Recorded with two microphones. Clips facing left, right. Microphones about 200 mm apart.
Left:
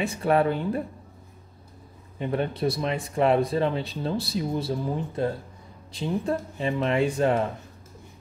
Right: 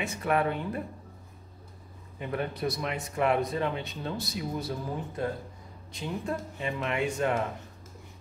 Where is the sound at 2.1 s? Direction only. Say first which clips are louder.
Left 5 dB; 30° left (ahead or behind).